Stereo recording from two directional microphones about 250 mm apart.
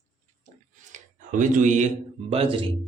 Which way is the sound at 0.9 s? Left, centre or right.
Right.